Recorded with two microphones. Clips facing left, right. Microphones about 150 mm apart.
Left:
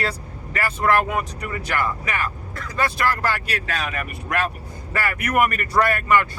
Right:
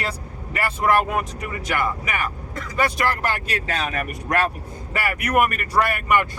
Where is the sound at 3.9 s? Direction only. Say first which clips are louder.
Right 3 dB; 40° right (ahead or behind).